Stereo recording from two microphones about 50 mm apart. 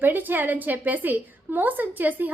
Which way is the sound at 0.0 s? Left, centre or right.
Right.